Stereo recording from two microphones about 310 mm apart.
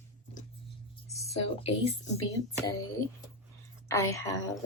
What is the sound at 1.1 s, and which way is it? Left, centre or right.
Speech, centre.